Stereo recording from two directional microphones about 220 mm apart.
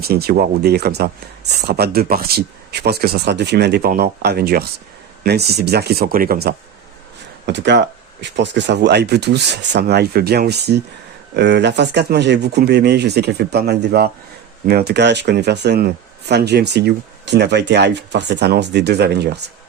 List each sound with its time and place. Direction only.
0.0 s speech: 45° right (ahead or behind)
7.4 s speech: 50° right (ahead or behind)